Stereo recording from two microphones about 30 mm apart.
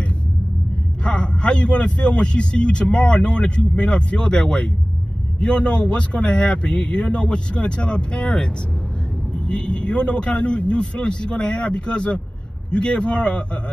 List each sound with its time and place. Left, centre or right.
1.0 s speech: left